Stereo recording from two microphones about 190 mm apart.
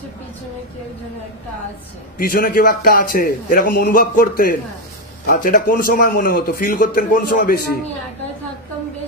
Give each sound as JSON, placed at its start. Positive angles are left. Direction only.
{"t": 2.1, "sound": "a man's voice", "side_deg": 50}